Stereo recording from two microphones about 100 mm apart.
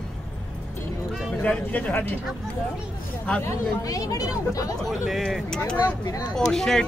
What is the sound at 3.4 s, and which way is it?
Speech, 30° left (ahead or behind).